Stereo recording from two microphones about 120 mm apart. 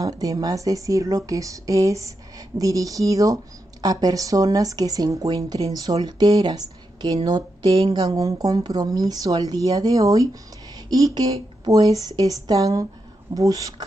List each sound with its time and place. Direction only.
0.0 s speech: 30° right (ahead or behind)